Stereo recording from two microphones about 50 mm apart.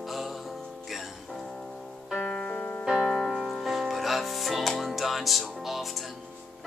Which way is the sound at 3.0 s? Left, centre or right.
Centre.